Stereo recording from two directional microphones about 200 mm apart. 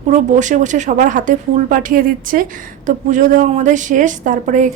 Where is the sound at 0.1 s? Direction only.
40° right (ahead or behind).